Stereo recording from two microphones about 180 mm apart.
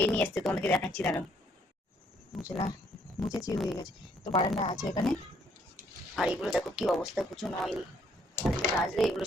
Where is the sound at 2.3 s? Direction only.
Centre (ahead or behind).